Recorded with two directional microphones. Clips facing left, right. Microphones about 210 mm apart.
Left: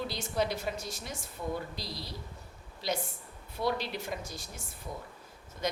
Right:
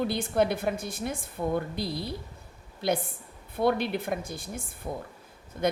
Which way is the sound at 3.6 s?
55° right (ahead or behind).